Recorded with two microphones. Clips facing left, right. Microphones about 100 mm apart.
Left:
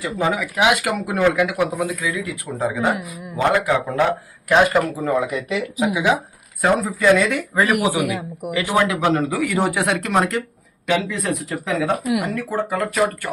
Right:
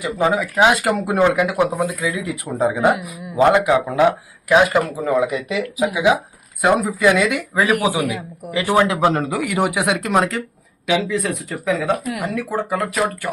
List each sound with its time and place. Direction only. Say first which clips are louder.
0.0 s speech: right 3 dB; 25° right (ahead or behind)
3.8 s speech: right 3 dB; 5° right (ahead or behind)
7.8 s speech: even; 15° left (ahead or behind)
8.5 s speech: right 3 dB; 20° right (ahead or behind)
9.0 s speech: right 2 dB; 30° right (ahead or behind)
9.3 s speech: even; 20° right (ahead or behind); by 12.3 s 10° left (ahead or behind)
12.3 s speech: right 1 dB; 10° right (ahead or behind)